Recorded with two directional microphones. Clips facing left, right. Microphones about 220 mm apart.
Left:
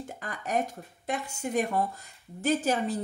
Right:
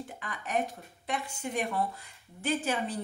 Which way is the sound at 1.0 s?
40° left (ahead or behind).